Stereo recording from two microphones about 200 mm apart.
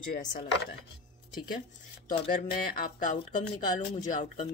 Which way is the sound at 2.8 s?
40° left (ahead or behind).